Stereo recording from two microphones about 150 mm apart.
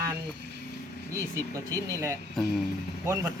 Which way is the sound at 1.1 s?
20° right (ahead or behind).